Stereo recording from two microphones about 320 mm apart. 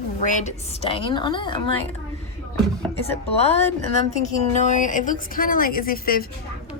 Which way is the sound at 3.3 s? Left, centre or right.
Centre.